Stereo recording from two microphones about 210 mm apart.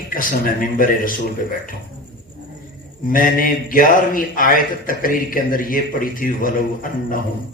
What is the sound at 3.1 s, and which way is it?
A man's voice, 40° left (ahead or behind).